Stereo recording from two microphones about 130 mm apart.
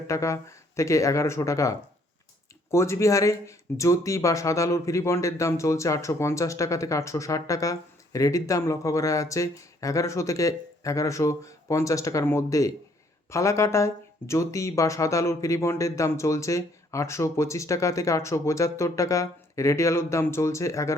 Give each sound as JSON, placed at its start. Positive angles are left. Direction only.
{"t": 0.1, "sound": "speech", "side_deg": 25}